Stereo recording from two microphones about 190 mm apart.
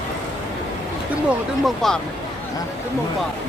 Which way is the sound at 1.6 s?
Centre (ahead or behind).